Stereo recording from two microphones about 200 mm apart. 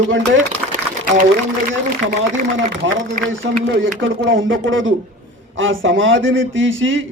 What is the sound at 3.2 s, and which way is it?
A man's voice, 70° right (ahead or behind).